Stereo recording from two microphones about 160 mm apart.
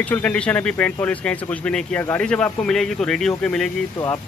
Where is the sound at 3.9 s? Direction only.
20° left (ahead or behind).